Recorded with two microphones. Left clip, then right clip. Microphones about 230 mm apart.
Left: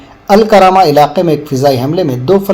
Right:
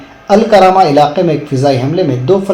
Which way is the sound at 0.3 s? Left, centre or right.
Left.